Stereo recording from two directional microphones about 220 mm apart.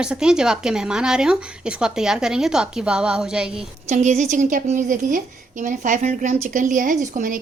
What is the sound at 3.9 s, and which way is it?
A woman's voice, 30° right (ahead or behind).